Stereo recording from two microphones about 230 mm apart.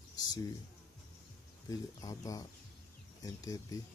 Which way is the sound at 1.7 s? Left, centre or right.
Centre.